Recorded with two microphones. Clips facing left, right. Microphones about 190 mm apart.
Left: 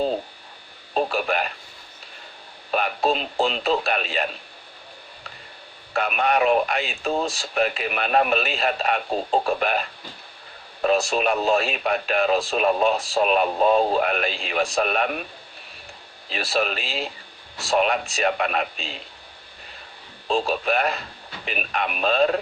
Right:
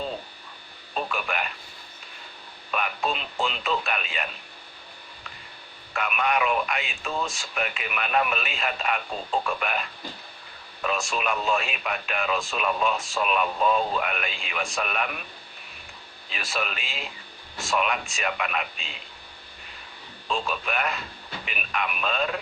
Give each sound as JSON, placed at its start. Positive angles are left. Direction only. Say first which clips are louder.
{"t": 0.9, "sound": "speech", "louder": "left 7 dB", "side_deg": 40}
{"t": 2.7, "sound": "speech", "louder": "left 6 dB", "side_deg": 35}
{"t": 5.9, "sound": "speech", "louder": "left 4 dB", "side_deg": 35}
{"t": 16.3, "sound": "speech", "louder": "left 7 dB", "side_deg": 35}
{"t": 20.2, "sound": "speech", "louder": "left 7 dB", "side_deg": 35}